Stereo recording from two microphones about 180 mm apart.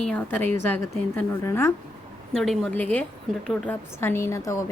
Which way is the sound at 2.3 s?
Centre (ahead or behind).